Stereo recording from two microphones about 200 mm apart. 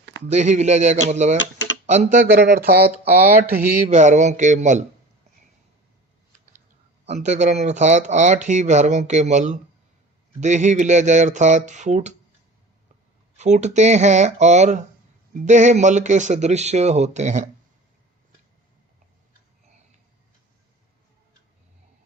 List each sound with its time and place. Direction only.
0.3 s speech: 35° right (ahead or behind)
2.2 s speech: 55° right (ahead or behind)
3.0 s speech: 30° right (ahead or behind)
7.0 s speech: 35° right (ahead or behind)
13.3 s speech: 35° right (ahead or behind)